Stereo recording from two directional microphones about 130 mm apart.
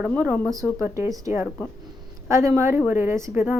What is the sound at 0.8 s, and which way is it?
A woman's voice, 25° right (ahead or behind).